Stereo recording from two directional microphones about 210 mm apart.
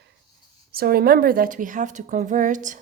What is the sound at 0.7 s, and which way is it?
A woman's voice, 45° right (ahead or behind).